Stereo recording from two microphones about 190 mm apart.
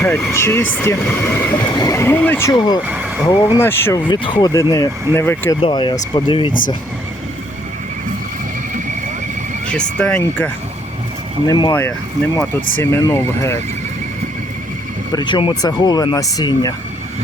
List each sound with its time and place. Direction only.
0.0 s speech: 15° left (ahead or behind)
2.8 s speech: 5° right (ahead or behind)
3.6 s speech: 10° left (ahead or behind)
5.5 s speech: 25° left (ahead or behind)
10.0 s speech: 10° left (ahead or behind)
11.4 s speech: 25° left (ahead or behind)
11.7 s speech: 10° left (ahead or behind)
15.1 s speech: 25° left (ahead or behind)